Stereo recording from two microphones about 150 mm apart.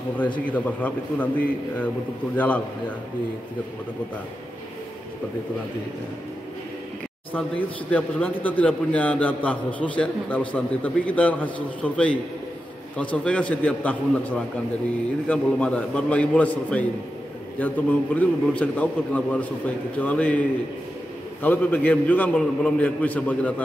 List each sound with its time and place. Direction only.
0.5 s a man's voice: 10° left (ahead or behind)
2.3 s a man's voice: 10° left (ahead or behind)
7.3 s a man's voice: 10° left (ahead or behind)